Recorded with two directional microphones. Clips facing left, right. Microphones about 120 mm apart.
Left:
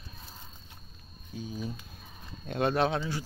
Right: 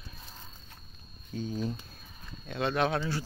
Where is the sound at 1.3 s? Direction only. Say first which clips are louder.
Right 4 dB; 10° left (ahead or behind).